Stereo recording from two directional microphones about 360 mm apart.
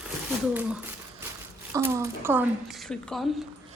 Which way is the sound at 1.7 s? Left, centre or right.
Centre.